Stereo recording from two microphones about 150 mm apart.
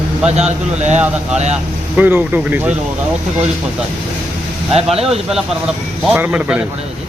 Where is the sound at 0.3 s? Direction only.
45° right (ahead or behind).